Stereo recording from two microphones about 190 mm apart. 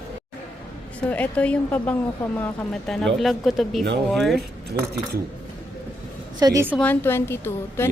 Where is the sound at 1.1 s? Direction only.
5° left (ahead or behind).